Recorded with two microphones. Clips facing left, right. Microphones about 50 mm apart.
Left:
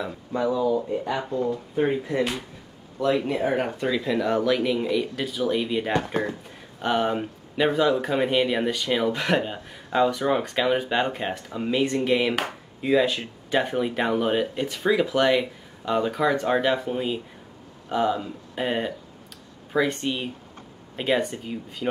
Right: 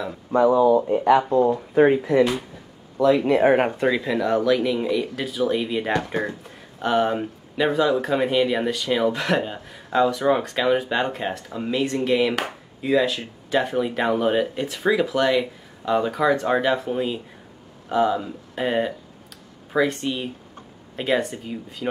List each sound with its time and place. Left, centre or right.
0.3 s speech: right
3.1 s speech: right
4.0 s speech: centre